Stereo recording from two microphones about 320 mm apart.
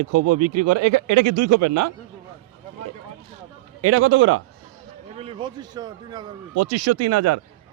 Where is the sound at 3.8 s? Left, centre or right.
Right.